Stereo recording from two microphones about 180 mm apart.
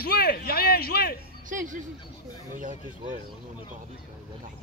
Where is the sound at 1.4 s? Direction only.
45° right (ahead or behind).